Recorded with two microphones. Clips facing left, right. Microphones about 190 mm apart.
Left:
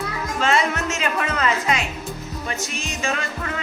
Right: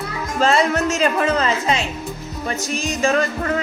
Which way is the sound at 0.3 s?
35° right (ahead or behind).